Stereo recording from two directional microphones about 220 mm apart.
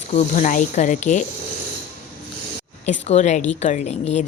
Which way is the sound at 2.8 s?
30° left (ahead or behind).